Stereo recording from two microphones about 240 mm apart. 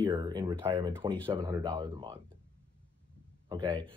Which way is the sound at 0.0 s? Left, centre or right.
Centre.